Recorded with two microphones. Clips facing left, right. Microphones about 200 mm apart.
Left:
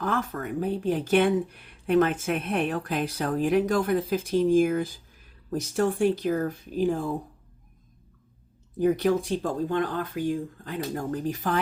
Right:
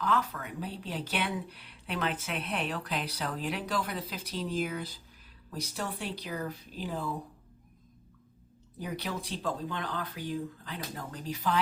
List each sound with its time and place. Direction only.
0.0 s speech: 50° left (ahead or behind)
8.8 s speech: 50° left (ahead or behind)